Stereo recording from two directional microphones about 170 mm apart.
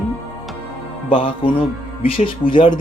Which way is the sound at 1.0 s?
30° left (ahead or behind).